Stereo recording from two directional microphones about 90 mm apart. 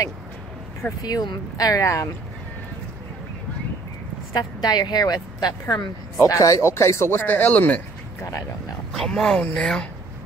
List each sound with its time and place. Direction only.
1.0 s speech: 50° left (ahead or behind); by 2.0 s 35° left (ahead or behind)
4.3 s speech: 50° left (ahead or behind); by 8.3 s 20° left (ahead or behind)
8.9 s speech: 5° left (ahead or behind)